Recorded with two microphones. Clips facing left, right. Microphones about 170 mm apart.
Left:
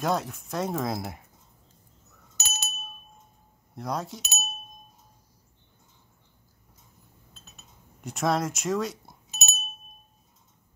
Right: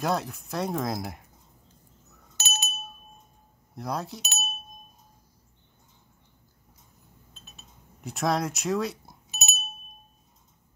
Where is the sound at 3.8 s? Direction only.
Centre (ahead or behind).